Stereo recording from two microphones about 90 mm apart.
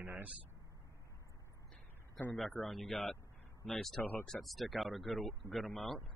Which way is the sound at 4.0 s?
20° left (ahead or behind).